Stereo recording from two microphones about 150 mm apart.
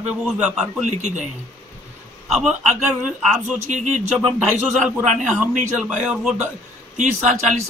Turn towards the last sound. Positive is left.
turn(degrees=-50)  # may be behind; listen again after turning